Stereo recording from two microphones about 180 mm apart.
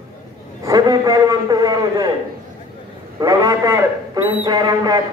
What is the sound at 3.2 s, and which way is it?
A man's voice, 20° right (ahead or behind).